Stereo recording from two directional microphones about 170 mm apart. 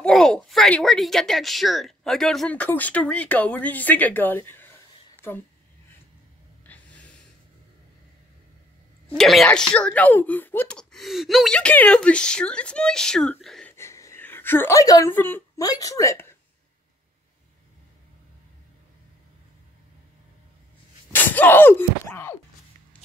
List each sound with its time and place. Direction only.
0.0 s a woman's voice: centre (ahead or behind)
6.7 s snort: 10° left (ahead or behind)
9.1 s speech: centre (ahead or behind)
13.7 s speech: 15° left (ahead or behind)
21.1 s a sound: 10° left (ahead or behind)